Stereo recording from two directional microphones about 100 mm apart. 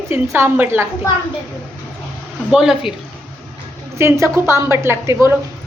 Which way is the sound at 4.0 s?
30° right (ahead or behind).